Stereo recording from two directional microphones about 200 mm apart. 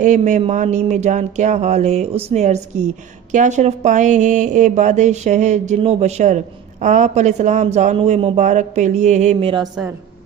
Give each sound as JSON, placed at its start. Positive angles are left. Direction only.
{"t": 0.0, "sound": "speech", "side_deg": -40}